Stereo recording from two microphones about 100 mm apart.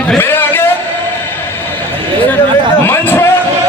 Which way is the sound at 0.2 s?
20° left (ahead or behind).